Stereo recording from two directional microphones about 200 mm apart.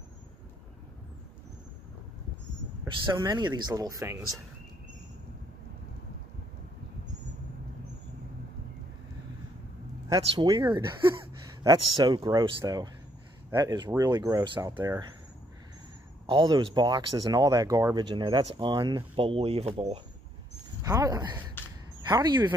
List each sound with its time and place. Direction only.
2.9 s speech: 20° right (ahead or behind)
10.0 s speech: 20° right (ahead or behind)
14.7 s speech: 10° right (ahead or behind)
16.3 s speech: 25° right (ahead or behind)
20.8 s speech: 15° right (ahead or behind)